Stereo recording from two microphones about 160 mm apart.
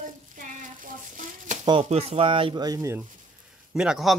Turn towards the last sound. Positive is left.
turn(degrees=0)  # may be behind; listen again after turning